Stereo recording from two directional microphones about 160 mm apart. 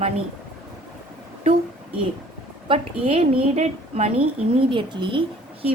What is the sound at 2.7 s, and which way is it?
A woman's voice, 35° right (ahead or behind).